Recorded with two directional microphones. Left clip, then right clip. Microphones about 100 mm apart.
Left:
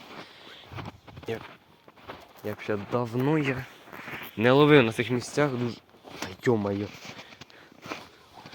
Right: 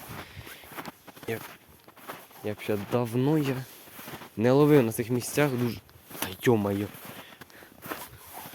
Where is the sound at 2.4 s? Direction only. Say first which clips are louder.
Even; 85° right.